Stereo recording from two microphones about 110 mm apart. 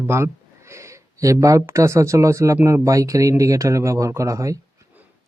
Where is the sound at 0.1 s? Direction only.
25° right (ahead or behind).